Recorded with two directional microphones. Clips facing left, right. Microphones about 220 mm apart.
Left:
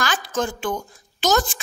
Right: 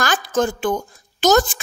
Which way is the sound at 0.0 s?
45° right (ahead or behind).